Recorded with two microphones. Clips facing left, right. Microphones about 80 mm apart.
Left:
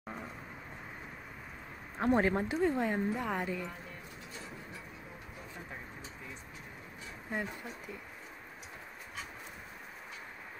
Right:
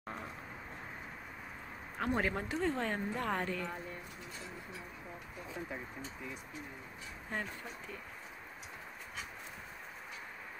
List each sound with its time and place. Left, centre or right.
0.0 s vehicle: centre
2.0 s speech: left
2.5 s speech: centre